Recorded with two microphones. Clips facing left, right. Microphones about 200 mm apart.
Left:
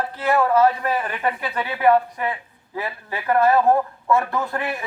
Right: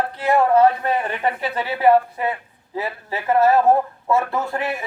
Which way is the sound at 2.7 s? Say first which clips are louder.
Right 2 dB; 20° right (ahead or behind).